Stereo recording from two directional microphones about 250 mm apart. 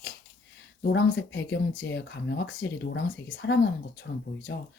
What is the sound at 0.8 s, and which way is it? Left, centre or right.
Speech, left.